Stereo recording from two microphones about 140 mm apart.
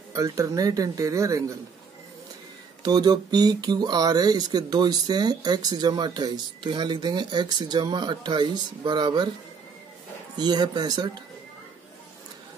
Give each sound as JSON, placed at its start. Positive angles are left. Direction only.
{"t": 0.1, "sound": "a man's voice", "side_deg": -25}
{"t": 2.8, "sound": "speech", "side_deg": -30}
{"t": 10.3, "sound": "a man's voice", "side_deg": -30}